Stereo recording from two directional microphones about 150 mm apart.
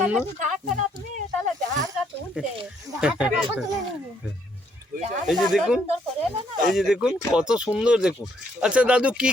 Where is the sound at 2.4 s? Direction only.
5° right (ahead or behind).